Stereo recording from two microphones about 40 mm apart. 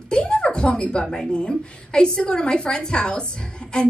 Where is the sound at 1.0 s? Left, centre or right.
Centre.